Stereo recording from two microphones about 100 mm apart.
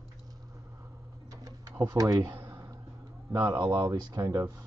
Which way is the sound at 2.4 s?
30° right (ahead or behind).